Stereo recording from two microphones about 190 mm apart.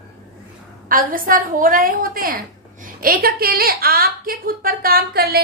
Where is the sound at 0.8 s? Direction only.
45° right (ahead or behind).